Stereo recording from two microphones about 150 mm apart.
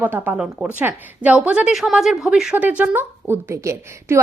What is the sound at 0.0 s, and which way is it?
A woman's voice, 10° right (ahead or behind).